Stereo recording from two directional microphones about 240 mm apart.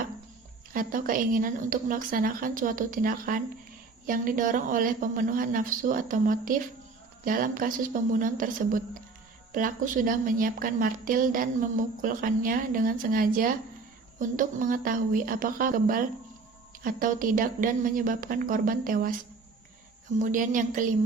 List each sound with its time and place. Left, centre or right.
0.7 s a woman's voice: right
20.1 s a woman's voice: right